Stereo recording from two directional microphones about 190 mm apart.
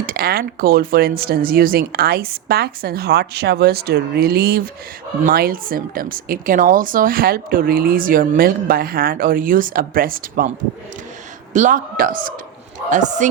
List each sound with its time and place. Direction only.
0.0 s speech: 50° right (ahead or behind)
11.5 s speech: 40° right (ahead or behind)